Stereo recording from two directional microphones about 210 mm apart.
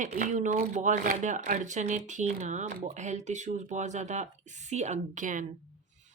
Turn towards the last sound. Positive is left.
turn(degrees=-40)  # may be behind; listen again after turning